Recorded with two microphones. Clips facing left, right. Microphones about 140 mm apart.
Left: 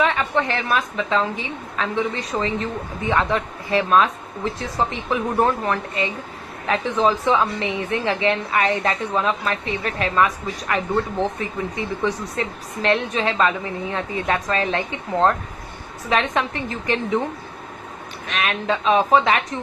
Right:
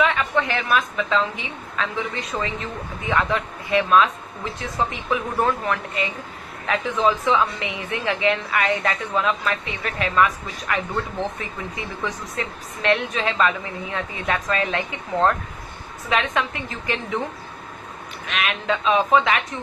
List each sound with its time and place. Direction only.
0.0 s a woman's voice: 35° left (ahead or behind)
18.2 s a woman's voice: 35° left (ahead or behind)